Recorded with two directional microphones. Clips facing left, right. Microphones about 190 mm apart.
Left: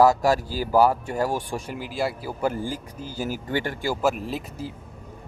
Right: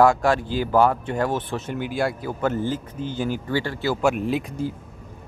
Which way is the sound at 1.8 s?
Centre (ahead or behind).